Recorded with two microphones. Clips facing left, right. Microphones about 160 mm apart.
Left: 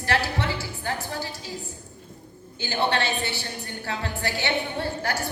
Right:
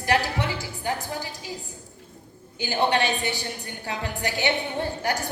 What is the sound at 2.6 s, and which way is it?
A woman's voice, 15° right (ahead or behind).